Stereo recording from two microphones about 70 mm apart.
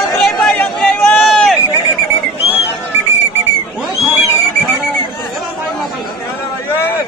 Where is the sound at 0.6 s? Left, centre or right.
Centre.